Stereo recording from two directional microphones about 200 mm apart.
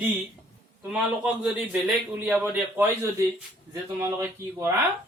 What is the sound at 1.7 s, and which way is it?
A man's voice, 5° right (ahead or behind).